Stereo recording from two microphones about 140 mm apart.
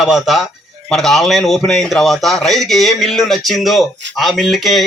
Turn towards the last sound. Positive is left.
turn(degrees=0)  # may be behind; listen again after turning